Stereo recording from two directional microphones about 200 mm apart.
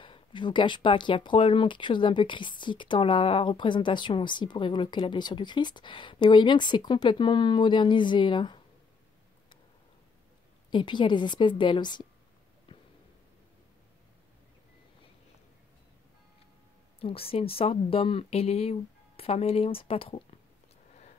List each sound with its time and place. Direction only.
0.0 s speech: 25° left (ahead or behind)
10.7 s speech: 25° left (ahead or behind)
17.0 s speech: 30° left (ahead or behind)